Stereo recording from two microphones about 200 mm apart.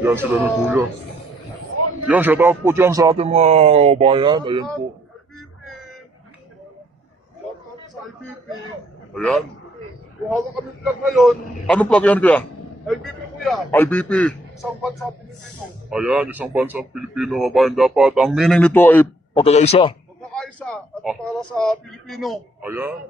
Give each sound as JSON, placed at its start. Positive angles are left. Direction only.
{"t": 0.0, "sound": "speech", "side_deg": -10}
{"t": 2.0, "sound": "speech", "side_deg": -10}
{"t": 3.2, "sound": "speech", "side_deg": -35}
{"t": 9.1, "sound": "speech", "side_deg": 5}
{"t": 10.8, "sound": "a man's voice", "side_deg": 0}
{"t": 19.3, "sound": "speech", "side_deg": 30}
{"t": 20.2, "sound": "a man's voice", "side_deg": 5}